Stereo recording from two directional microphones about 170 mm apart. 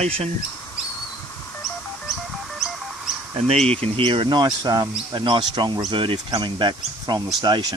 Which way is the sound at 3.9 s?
30° right (ahead or behind).